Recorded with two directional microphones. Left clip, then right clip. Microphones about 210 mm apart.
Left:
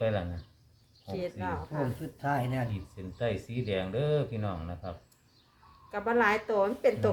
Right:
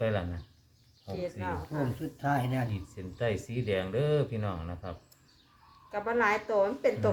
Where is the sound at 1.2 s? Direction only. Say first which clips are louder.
Even; 20° left (ahead or behind).